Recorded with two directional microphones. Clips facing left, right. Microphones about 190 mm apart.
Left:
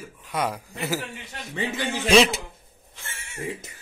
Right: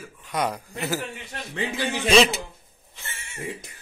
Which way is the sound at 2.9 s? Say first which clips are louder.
Right 1 dB; 10° right (ahead or behind).